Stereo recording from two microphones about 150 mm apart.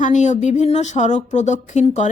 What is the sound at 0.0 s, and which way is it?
A woman's voice, 55° left (ahead or behind).